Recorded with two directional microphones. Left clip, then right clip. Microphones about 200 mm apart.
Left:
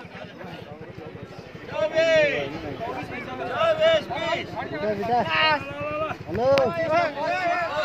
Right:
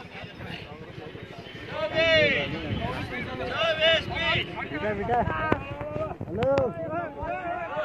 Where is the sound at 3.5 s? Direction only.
55° left (ahead or behind).